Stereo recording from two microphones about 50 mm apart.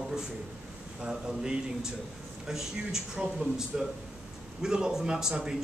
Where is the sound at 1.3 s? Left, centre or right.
Centre.